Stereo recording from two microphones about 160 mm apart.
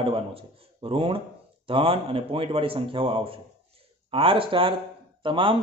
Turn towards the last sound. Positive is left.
turn(degrees=-30)  # may be behind; listen again after turning